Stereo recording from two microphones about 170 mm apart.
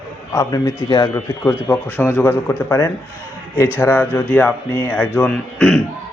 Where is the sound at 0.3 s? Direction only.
20° left (ahead or behind).